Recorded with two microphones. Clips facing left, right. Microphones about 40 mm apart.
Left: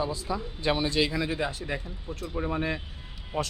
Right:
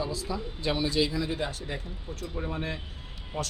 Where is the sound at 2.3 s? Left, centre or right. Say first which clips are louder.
Left 5 dB; left.